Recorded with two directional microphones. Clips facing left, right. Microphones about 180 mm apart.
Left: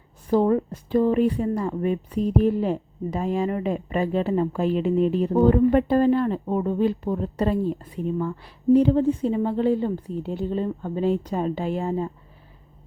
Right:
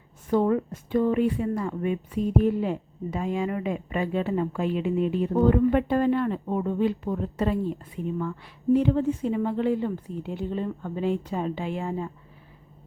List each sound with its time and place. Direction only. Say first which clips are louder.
0.3 s a woman's voice: left 3 dB; 35° left (ahead or behind)